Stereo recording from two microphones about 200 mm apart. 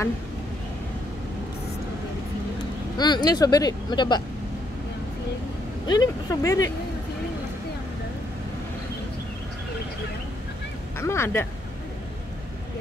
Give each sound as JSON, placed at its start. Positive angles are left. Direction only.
{"t": 3.0, "sound": "speech", "side_deg": 20}
{"t": 5.9, "sound": "speech", "side_deg": 20}
{"t": 11.0, "sound": "speech", "side_deg": 15}